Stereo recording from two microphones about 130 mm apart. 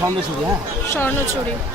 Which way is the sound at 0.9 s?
20° left (ahead or behind).